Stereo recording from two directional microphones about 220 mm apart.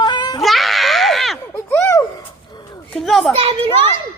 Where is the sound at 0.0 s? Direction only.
20° left (ahead or behind).